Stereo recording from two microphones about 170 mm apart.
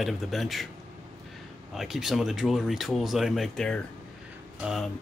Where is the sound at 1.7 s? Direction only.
Centre (ahead or behind).